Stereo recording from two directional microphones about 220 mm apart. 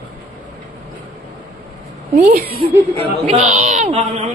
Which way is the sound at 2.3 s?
45° right (ahead or behind).